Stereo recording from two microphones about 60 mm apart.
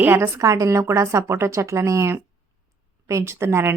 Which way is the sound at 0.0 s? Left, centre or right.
Right.